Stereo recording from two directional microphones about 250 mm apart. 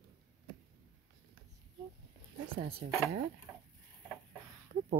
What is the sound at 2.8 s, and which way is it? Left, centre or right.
Speech, right.